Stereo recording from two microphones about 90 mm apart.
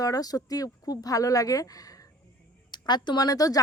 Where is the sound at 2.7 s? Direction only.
55° left (ahead or behind).